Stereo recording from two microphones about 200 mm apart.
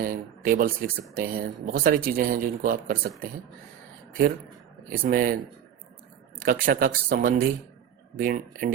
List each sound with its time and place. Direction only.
0.0 s speech: 45° right (ahead or behind)
4.9 s speech: 45° right (ahead or behind)
6.4 s speech: 45° right (ahead or behind)